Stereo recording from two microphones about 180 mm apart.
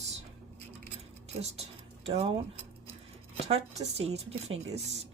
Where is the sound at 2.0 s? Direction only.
35° right (ahead or behind).